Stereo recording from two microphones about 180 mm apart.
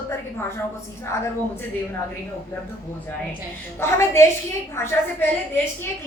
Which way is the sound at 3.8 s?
15° left (ahead or behind).